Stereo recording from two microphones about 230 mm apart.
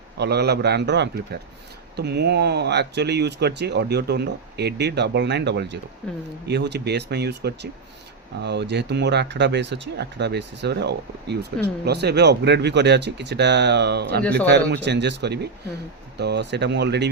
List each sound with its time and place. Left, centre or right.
0.2 s speech: right
6.0 s speech: centre
6.5 s speech: right